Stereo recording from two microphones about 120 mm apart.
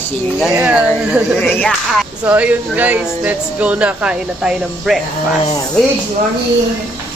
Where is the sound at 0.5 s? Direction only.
10° right (ahead or behind).